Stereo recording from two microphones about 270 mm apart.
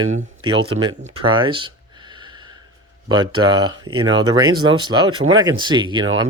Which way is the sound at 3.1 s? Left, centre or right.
Centre.